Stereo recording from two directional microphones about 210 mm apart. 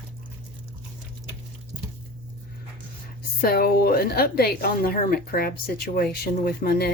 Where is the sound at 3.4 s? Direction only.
45° left (ahead or behind).